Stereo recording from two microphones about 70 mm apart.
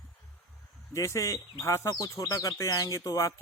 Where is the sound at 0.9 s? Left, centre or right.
Left.